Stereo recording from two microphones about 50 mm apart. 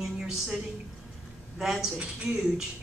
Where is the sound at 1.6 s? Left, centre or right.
Centre.